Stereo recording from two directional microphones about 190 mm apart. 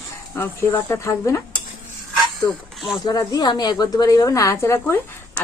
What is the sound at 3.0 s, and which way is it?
A woman's voice, 20° left (ahead or behind).